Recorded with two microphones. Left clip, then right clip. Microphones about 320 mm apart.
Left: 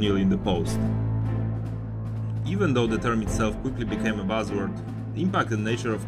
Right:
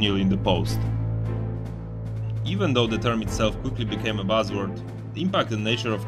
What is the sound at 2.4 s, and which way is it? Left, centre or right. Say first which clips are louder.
Speech: right 1 dB; centre.